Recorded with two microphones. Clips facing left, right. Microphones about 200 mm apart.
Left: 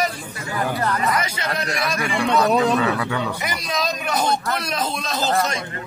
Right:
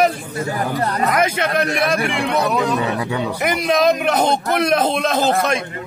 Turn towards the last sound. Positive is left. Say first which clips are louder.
# right 4 dB
turn(degrees=-55)  # may be behind; listen again after turning